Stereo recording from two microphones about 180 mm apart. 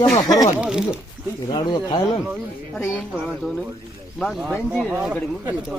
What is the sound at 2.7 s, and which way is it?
Speech, 15° left (ahead or behind).